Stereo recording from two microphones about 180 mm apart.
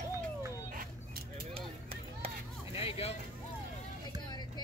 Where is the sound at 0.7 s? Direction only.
50° right (ahead or behind).